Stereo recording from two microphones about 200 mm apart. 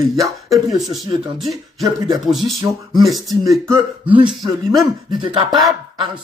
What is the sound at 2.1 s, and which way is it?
Speech, centre (ahead or behind).